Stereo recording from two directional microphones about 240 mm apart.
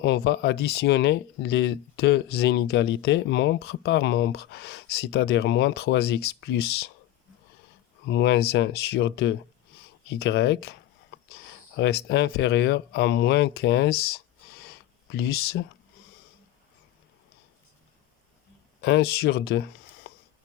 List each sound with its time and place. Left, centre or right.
0.0 s speech: left
8.0 s speech: left
11.8 s speech: left
18.8 s speech: left